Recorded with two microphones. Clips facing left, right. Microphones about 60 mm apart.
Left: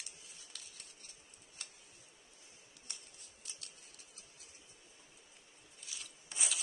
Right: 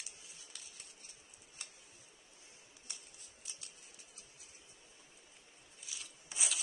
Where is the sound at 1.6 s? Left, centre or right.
Centre.